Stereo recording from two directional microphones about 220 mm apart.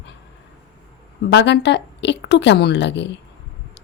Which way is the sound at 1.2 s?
50° left (ahead or behind).